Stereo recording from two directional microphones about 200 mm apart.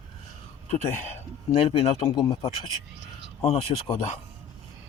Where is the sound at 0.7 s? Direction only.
35° left (ahead or behind).